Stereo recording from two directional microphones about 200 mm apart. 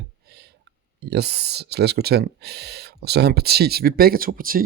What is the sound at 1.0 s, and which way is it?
Speech, 55° right (ahead or behind).